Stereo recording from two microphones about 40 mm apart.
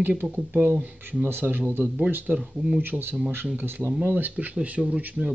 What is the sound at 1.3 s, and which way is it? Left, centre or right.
Speech, right.